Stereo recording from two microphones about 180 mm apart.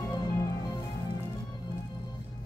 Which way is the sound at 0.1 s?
25° left (ahead or behind).